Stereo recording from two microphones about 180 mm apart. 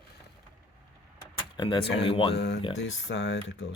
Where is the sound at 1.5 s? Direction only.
25° left (ahead or behind).